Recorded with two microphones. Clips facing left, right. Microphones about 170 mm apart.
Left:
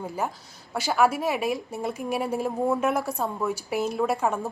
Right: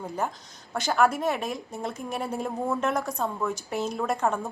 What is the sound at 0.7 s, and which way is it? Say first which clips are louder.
A woman's voice: left 1 dB; 5° left (ahead or behind).